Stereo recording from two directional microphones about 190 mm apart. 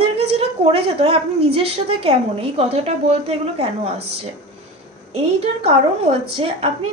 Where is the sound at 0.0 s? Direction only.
30° right (ahead or behind).